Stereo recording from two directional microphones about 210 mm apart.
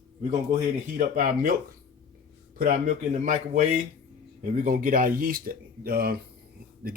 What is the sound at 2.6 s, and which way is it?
Speech, 40° right (ahead or behind).